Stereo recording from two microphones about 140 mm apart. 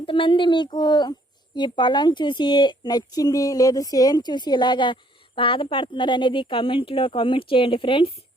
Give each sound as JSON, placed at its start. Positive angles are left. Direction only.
{"t": 0.0, "sound": "speech", "side_deg": 40}